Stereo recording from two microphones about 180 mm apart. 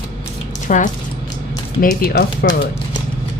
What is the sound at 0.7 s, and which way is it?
Speech, 45° left (ahead or behind).